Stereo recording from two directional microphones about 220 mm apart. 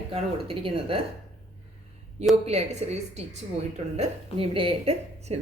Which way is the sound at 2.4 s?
30° right (ahead or behind).